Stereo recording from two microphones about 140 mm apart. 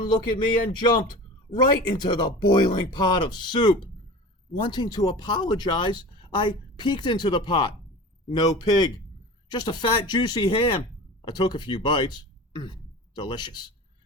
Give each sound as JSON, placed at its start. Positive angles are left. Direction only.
{"t": 0.0, "sound": "speech", "side_deg": 30}